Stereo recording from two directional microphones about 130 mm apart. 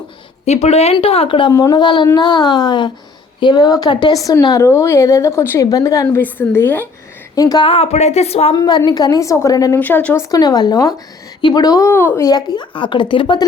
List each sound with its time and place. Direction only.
0.4 s speech: 55° left (ahead or behind)
1.5 s a woman's voice: 30° left (ahead or behind)
7.3 s a woman's voice: 30° left (ahead or behind)
7.6 s speech: 50° left (ahead or behind)
8.5 s a woman's voice: 30° left (ahead or behind)
9.8 s speech: 15° left (ahead or behind)
10.3 s a woman's voice: 30° left (ahead or behind)